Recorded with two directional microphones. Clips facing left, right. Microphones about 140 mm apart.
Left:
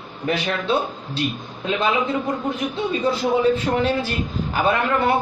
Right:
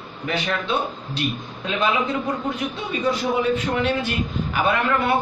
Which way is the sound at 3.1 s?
35° left (ahead or behind).